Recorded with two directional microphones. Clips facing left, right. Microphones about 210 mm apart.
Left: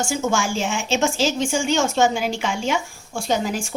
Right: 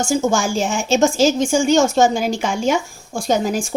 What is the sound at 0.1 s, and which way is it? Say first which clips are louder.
A woman's voice: right 5 dB; 40° right (ahead or behind).